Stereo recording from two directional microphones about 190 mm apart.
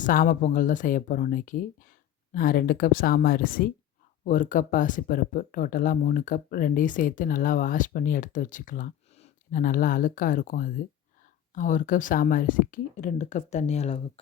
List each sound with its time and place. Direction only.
0.0 s speech: 45° left (ahead or behind)